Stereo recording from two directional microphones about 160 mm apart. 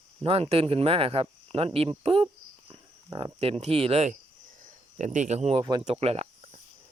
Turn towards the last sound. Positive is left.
turn(degrees=-40)  # may be behind; listen again after turning